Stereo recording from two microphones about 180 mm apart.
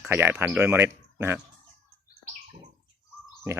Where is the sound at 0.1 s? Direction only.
10° right (ahead or behind).